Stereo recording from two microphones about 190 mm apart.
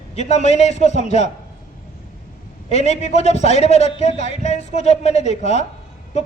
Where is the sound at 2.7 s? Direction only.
35° left (ahead or behind).